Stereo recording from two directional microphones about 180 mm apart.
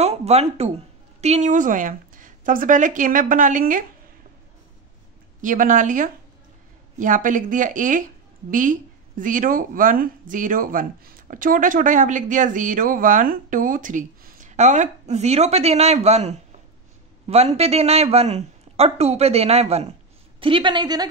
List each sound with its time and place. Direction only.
0.0 s a woman's voice: 35° right (ahead or behind)
5.4 s a woman's voice: 45° right (ahead or behind); by 21.1 s 25° right (ahead or behind)